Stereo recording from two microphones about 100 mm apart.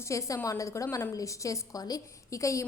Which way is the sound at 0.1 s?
30° left (ahead or behind).